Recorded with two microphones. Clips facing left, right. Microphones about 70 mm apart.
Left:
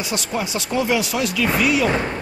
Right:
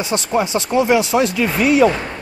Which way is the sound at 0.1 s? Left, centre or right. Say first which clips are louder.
Right 8 dB; right.